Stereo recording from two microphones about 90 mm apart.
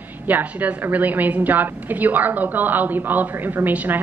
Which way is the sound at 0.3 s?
20° right (ahead or behind).